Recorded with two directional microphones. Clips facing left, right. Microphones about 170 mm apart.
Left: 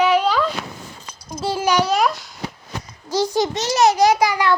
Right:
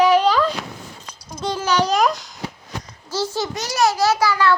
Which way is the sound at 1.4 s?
10° left (ahead or behind).